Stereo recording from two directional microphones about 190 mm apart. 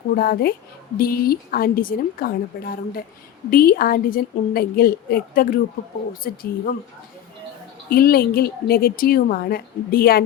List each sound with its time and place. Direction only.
0.2 s a woman's voice: 50° left (ahead or behind)
7.9 s a woman's voice: 50° left (ahead or behind)